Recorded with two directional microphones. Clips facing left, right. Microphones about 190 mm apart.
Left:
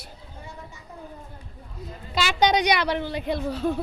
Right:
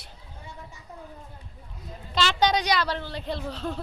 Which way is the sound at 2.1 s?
10° left (ahead or behind).